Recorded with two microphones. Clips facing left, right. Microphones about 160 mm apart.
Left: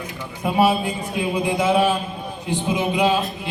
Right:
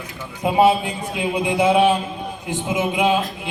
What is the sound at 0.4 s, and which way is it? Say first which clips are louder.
Speech: right 2 dB; 20° right (ahead or behind).